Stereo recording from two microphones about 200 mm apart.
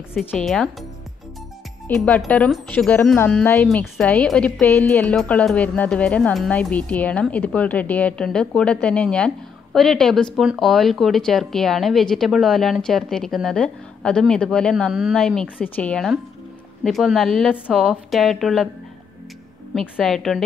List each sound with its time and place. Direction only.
0.3 s speech: 5° left (ahead or behind)
1.9 s speech: 5° left (ahead or behind)
19.7 s speech: centre (ahead or behind)